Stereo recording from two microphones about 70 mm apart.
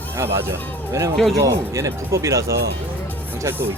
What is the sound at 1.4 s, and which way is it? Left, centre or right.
Speech, right.